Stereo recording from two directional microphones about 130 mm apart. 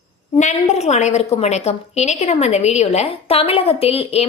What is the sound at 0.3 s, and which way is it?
A woman's voice, 60° left (ahead or behind).